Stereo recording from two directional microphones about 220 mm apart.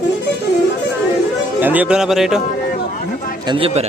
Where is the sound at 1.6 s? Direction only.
5° right (ahead or behind).